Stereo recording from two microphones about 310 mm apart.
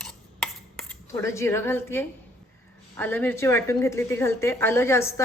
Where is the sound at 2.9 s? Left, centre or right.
Centre.